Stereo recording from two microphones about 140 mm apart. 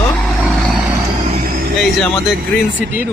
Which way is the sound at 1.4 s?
90° right.